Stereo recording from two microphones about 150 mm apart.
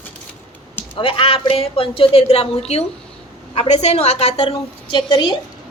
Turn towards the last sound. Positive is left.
turn(degrees=30)  # may be behind; listen again after turning